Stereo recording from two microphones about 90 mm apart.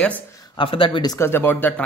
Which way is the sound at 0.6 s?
75° left (ahead or behind).